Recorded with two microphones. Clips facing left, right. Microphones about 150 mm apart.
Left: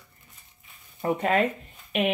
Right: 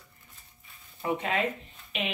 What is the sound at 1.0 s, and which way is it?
Speech, 45° left (ahead or behind).